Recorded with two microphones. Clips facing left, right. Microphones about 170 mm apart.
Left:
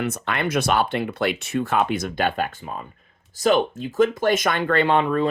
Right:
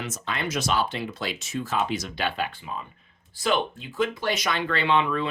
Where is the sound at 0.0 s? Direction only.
60° left (ahead or behind).